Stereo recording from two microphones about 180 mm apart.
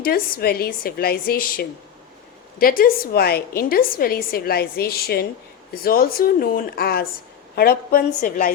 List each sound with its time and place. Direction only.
0.0 s a woman's voice: 55° left (ahead or behind)